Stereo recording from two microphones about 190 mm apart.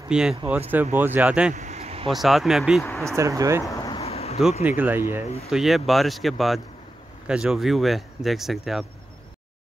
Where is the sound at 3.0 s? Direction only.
15° right (ahead or behind).